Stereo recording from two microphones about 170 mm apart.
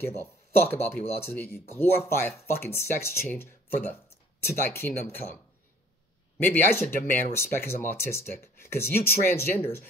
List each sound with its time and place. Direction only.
0.0 s speech: 15° left (ahead or behind)
6.4 s speech: 10° left (ahead or behind)